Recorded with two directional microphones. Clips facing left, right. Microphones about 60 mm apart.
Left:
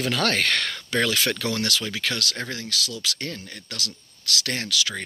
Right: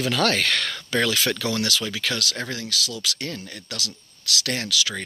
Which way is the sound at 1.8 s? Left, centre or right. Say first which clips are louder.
Right 1 dB; left.